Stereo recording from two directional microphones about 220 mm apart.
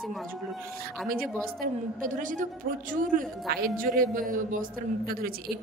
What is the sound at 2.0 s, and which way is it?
Speech, 35° right (ahead or behind).